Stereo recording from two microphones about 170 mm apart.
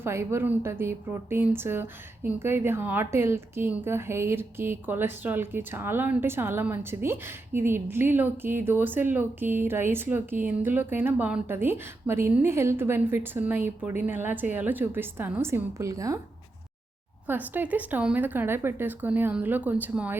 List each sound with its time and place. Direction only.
0.0 s a woman's voice: 15° right (ahead or behind)
17.2 s a woman's voice: 10° right (ahead or behind)